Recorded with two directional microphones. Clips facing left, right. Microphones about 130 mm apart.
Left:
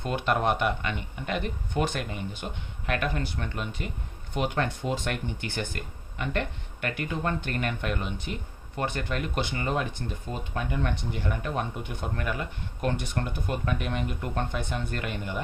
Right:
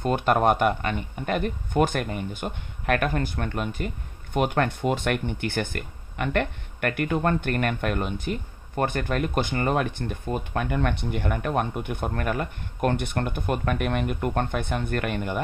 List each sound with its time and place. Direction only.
0.0 s speech: 45° right (ahead or behind)